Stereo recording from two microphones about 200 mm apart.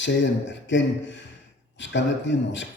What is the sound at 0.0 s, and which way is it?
A man's voice, 65° left (ahead or behind).